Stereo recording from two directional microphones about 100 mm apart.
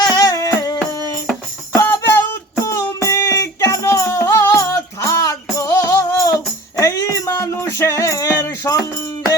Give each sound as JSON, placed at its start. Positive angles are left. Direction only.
{"t": 0.0, "sound": "music", "side_deg": 35}